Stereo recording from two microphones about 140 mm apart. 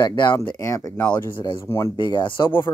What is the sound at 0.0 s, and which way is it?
Speech, 30° left (ahead or behind).